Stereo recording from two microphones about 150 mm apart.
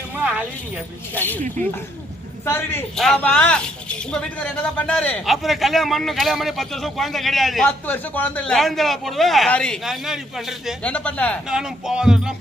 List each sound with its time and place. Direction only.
0.2 s a sound: 10° right (ahead or behind)
1.1 s speech: 10° left (ahead or behind)
2.5 s speech: 15° left (ahead or behind)
3.0 s speech: 5° left (ahead or behind)
7.9 s speech: 10° left (ahead or behind)
11.4 s speech: 5° right (ahead or behind)